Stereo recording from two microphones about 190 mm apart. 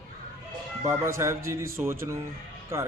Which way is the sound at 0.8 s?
15° right (ahead or behind).